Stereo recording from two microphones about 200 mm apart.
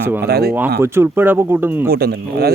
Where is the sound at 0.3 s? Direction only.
50° right (ahead or behind).